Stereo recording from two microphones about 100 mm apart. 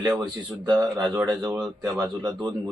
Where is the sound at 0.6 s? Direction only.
45° right (ahead or behind).